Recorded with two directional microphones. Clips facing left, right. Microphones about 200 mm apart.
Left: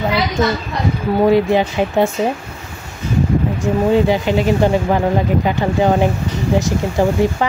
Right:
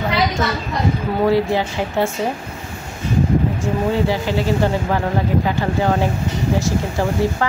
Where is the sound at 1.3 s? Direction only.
20° left (ahead or behind).